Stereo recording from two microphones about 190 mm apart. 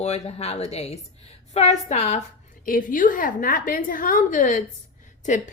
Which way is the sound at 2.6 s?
45° left (ahead or behind).